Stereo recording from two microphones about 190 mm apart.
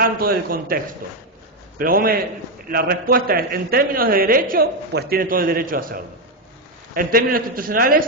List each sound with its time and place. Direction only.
0.0 s a man's voice: 50° right (ahead or behind)
1.8 s a man's voice: 50° right (ahead or behind)